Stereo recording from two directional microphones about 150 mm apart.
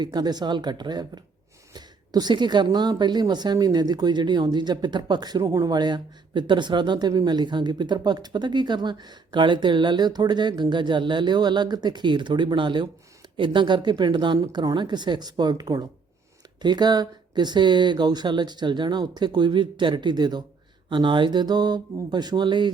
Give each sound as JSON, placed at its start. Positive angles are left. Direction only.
{"t": 0.0, "sound": "speech", "side_deg": -30}